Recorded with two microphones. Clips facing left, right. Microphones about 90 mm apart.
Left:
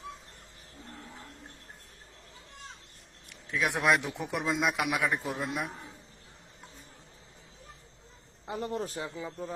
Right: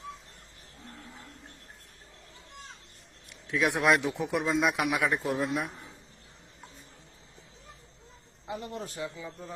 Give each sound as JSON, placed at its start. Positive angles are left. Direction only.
{"t": 3.5, "sound": "speech", "side_deg": 0}
{"t": 8.4, "sound": "a man's voice", "side_deg": 40}